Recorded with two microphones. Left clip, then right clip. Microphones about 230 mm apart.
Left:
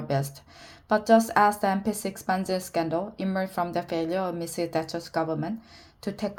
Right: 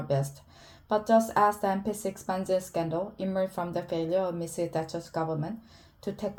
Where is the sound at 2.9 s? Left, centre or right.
Left.